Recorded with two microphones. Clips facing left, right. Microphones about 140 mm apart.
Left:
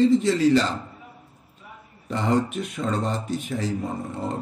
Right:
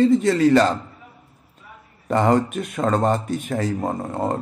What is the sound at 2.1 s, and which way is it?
A man's voice, 55° right (ahead or behind).